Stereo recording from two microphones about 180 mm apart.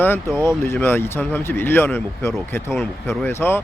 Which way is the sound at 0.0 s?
10° left (ahead or behind).